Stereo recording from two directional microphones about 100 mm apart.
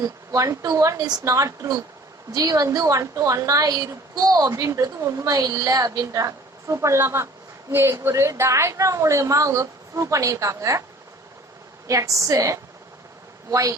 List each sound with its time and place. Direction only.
0.0 s a woman's voice: 30° right (ahead or behind)
11.9 s a woman's voice: 30° right (ahead or behind)